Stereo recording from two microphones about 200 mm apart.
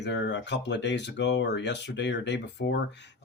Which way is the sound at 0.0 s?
60° left (ahead or behind).